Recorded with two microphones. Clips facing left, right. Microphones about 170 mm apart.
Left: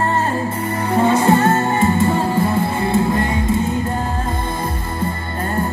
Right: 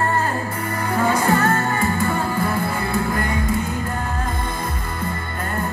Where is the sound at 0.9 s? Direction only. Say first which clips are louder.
Left 5 dB; 25° left (ahead or behind).